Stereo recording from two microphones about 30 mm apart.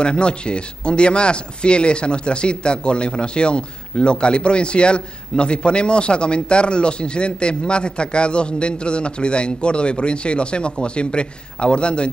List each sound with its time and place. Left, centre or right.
0.0 s speech: left